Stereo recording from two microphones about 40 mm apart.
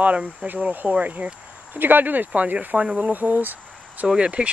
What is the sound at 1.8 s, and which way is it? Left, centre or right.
Speech, right.